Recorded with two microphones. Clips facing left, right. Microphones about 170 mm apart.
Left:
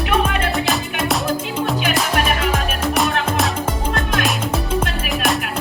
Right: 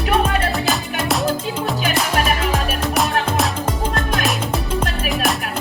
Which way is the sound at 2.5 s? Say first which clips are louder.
Even; centre (ahead or behind).